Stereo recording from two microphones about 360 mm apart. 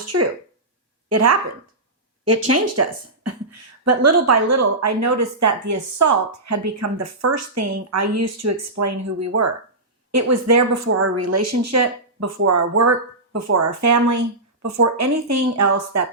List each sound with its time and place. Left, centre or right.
0.0 s a woman's voice: right
2.8 s a woman's voice: right